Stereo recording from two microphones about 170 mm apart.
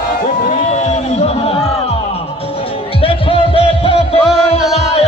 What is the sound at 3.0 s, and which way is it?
Music, 35° left (ahead or behind).